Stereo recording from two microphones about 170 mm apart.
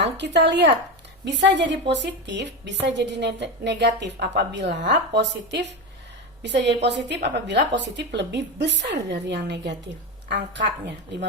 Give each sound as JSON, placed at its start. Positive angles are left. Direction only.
{"t": 0.2, "sound": "a woman's voice", "side_deg": -90}